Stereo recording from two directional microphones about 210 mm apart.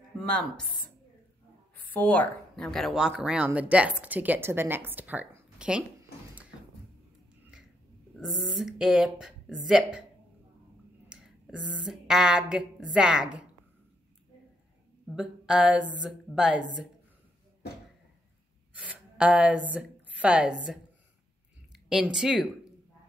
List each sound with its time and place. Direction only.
0.2 s speech: 5° left (ahead or behind)
2.0 s speech: 10° left (ahead or behind)
8.2 s speech: centre (ahead or behind)
11.1 s speech: 5° right (ahead or behind)
15.0 s speech: 5° right (ahead or behind)
18.8 s a woman's voice: 5° right (ahead or behind)
21.8 s speech: 5° right (ahead or behind)